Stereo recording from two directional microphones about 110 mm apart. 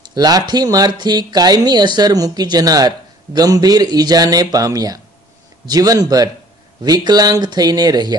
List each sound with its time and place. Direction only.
0.1 s speech: 40° right (ahead or behind)